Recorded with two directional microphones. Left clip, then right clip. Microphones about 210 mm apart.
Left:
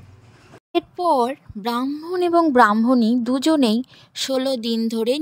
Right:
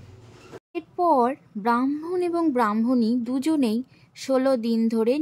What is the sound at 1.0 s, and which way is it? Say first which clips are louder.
Speech: even; 40° left (ahead or behind).